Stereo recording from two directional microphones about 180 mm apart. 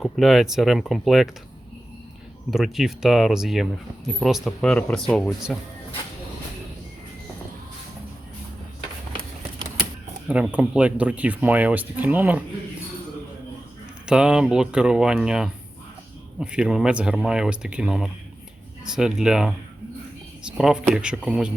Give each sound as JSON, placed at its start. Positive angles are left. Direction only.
{"t": 0.0, "sound": "speech", "side_deg": 0}
{"t": 2.5, "sound": "speech", "side_deg": 0}
{"t": 10.2, "sound": "speech", "side_deg": -5}
{"t": 14.1, "sound": "speech", "side_deg": -5}